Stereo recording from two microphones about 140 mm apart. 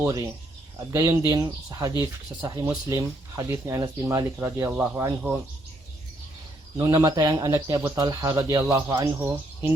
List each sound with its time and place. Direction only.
0.9 s speech: 25° right (ahead or behind)
6.7 s speech: 25° right (ahead or behind)